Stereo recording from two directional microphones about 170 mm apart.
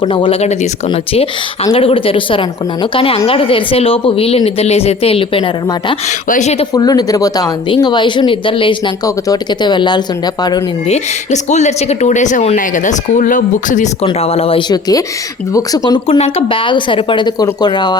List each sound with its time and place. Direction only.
0.0 s speech: 30° left (ahead or behind)
6.2 s speech: 45° left (ahead or behind)
6.7 s speech: 20° left (ahead or behind)
10.8 s speech: 40° left (ahead or behind)
14.0 s speech: 35° left (ahead or behind)
16.0 s speech: 35° left (ahead or behind)